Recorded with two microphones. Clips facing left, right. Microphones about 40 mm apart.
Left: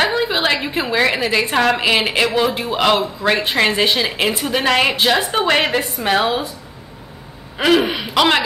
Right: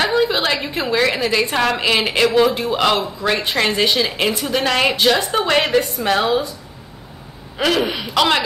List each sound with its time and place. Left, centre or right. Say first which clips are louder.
0.0 s a woman's voice: even; centre
7.5 s a woman's voice: left 3 dB; centre